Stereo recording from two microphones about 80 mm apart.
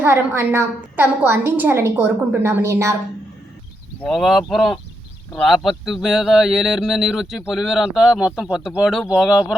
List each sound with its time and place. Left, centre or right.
0.0 s a woman's voice: right
4.0 s speech: centre